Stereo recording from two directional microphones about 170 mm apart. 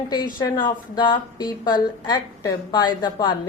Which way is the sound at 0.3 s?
25° left (ahead or behind).